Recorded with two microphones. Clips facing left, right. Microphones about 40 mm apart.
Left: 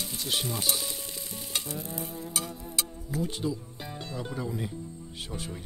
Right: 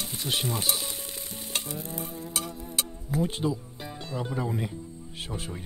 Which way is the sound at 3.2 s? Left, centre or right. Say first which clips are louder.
Right 2 dB; right.